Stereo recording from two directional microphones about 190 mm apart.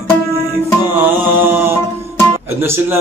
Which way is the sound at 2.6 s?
10° right (ahead or behind).